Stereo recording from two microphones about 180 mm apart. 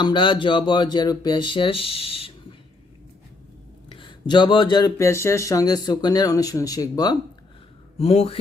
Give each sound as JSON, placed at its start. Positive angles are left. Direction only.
{"t": 0.0, "sound": "speech", "side_deg": 25}
{"t": 3.8, "sound": "speech", "side_deg": 25}
{"t": 7.9, "sound": "speech", "side_deg": 35}